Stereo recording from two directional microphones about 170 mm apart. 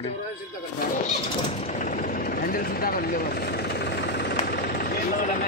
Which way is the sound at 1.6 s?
45° left (ahead or behind).